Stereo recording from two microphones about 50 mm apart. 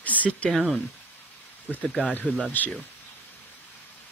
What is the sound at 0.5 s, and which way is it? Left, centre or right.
Speech, centre.